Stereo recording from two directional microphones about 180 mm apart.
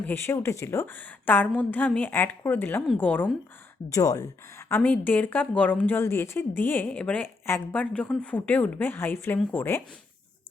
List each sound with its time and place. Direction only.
0.0 s a woman's voice: 10° left (ahead or behind)
3.9 s speech: 20° left (ahead or behind)
4.7 s a woman's voice: 10° left (ahead or behind)